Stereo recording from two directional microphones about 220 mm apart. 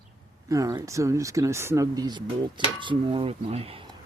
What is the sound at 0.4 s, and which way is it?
Speech, 15° right (ahead or behind).